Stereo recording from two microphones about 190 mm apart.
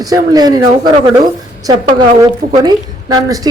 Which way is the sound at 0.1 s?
20° right (ahead or behind).